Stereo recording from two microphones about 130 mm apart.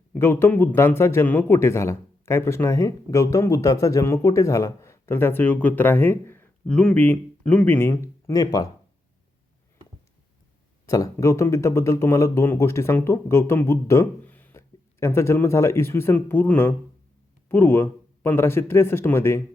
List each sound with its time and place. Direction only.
0.1 s a man's voice: 20° left (ahead or behind)
10.8 s a man's voice: 25° left (ahead or behind)